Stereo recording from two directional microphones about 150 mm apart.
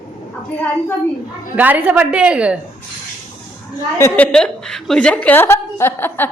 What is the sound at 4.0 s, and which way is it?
A woman's voice, 10° left (ahead or behind).